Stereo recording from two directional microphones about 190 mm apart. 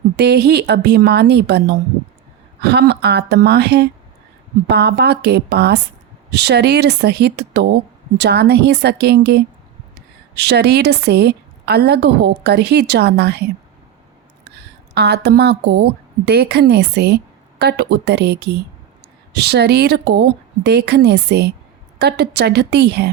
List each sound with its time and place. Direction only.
0.2 s a woman's voice: 60° right (ahead or behind)
14.9 s a woman's voice: 60° right (ahead or behind)